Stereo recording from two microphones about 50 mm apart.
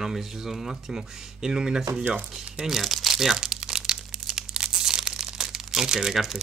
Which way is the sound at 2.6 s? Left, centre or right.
Centre.